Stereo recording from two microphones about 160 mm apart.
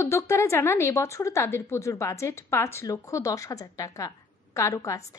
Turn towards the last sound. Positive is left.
turn(degrees=20)  # may be behind; listen again after turning